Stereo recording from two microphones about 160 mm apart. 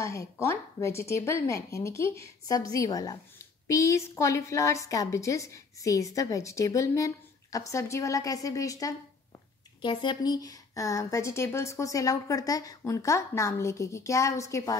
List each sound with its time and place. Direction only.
0.0 s speech: 20° left (ahead or behind)